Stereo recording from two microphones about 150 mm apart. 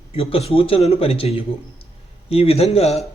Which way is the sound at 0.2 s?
40° left (ahead or behind).